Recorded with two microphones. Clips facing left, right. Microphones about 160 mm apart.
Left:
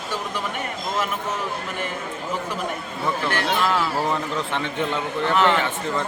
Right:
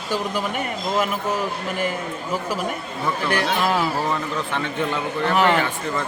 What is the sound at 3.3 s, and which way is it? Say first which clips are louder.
Speech: right 2 dB; 15° right (ahead or behind).